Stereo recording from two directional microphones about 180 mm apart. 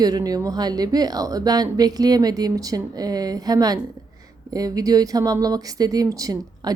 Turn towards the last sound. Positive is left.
turn(degrees=-20)  # may be behind; listen again after turning